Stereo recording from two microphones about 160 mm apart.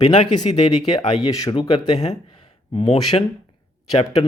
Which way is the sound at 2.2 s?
35° left (ahead or behind).